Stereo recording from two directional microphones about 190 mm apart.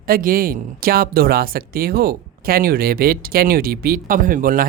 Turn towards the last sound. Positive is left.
turn(degrees=-45)  # may be behind; listen again after turning